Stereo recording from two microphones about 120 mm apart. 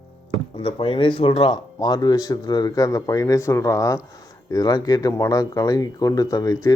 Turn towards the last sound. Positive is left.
turn(degrees=30)  # may be behind; listen again after turning